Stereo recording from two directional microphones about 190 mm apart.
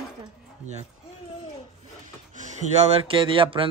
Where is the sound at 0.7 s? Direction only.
35° right (ahead or behind).